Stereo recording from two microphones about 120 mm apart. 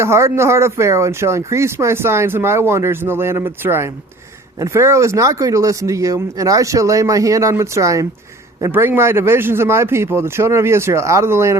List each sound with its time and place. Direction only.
0.0 s speech: 25° right (ahead or behind)